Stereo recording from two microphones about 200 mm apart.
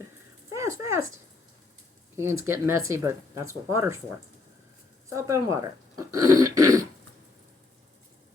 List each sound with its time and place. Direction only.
0.5 s speech: 15° right (ahead or behind)
2.4 s speech: 15° right (ahead or behind)
5.0 s speech: 15° right (ahead or behind)